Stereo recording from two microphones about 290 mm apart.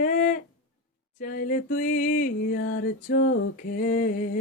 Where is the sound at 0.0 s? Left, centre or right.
Left.